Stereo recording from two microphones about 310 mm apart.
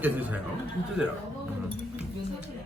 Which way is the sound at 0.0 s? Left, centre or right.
Centre.